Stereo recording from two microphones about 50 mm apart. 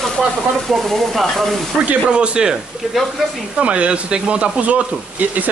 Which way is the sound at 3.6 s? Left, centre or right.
Right.